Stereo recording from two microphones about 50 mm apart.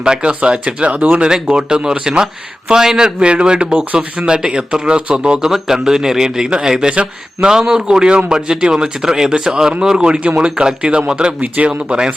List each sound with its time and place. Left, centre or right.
0.0 s a man's voice: centre
5.5 s a man's voice: centre